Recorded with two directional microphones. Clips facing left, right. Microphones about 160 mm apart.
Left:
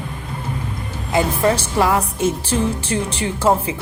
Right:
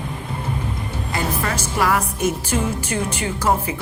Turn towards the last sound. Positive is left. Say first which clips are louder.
# left 3 dB
turn(degrees=30)  # may be behind; listen again after turning